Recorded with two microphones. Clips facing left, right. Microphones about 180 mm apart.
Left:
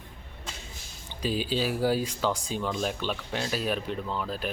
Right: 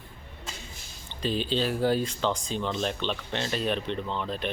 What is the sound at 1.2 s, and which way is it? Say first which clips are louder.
Speech: right 1 dB; 10° left (ahead or behind).